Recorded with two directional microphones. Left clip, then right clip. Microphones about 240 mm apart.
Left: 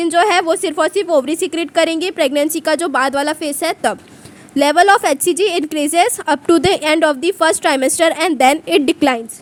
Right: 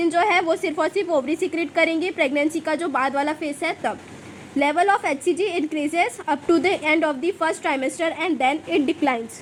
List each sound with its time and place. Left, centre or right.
0.0 s a woman's voice: left